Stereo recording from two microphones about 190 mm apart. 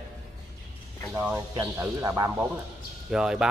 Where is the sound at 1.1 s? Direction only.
5° right (ahead or behind).